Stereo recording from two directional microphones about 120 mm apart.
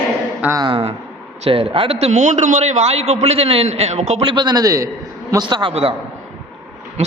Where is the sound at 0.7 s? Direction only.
55° right (ahead or behind).